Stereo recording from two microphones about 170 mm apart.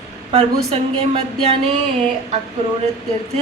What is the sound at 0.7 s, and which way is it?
A woman's voice, 35° right (ahead or behind).